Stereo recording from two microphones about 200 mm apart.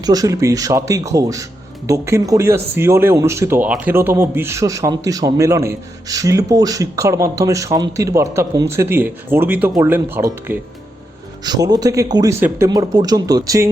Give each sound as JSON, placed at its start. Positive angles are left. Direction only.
{"t": 0.0, "sound": "speech", "side_deg": -20}